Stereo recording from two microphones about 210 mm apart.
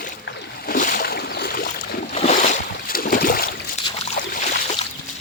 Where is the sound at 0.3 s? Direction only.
45° left (ahead or behind).